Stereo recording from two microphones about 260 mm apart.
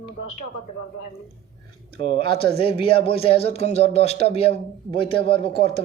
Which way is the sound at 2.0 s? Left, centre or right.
Centre.